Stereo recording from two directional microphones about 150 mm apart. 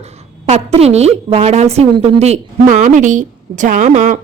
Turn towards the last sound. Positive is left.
turn(degrees=-55)  # may be behind; listen again after turning